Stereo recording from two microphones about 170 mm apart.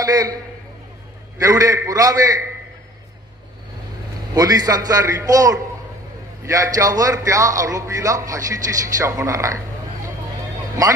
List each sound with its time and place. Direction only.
0.0 s a man's voice: 20° right (ahead or behind)
1.4 s speech: 20° right (ahead or behind)
4.3 s speech: 20° right (ahead or behind)